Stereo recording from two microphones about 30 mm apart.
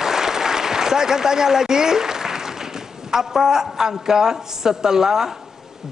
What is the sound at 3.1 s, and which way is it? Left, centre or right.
A woman's voice, centre.